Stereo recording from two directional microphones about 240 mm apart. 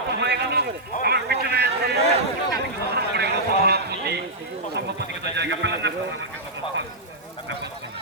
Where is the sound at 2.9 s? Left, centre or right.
Right.